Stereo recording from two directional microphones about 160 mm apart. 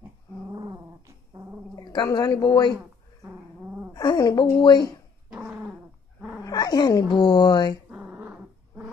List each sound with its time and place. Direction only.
0.5 s cat: 20° right (ahead or behind)
1.8 s a woman's voice: 25° left (ahead or behind)
3.9 s speech: 25° left (ahead or behind)
5.5 s dog: 5° right (ahead or behind)
6.4 s speech: 25° left (ahead or behind)
7.9 s dog: 10° right (ahead or behind)